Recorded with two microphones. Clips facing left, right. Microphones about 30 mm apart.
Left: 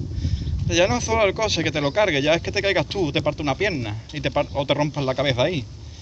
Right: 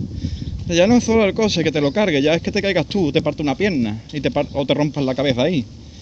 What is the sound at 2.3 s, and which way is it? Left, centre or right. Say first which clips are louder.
Speech: right 2 dB; right.